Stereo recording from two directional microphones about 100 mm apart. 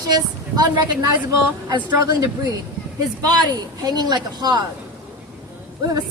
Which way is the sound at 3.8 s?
40° right (ahead or behind).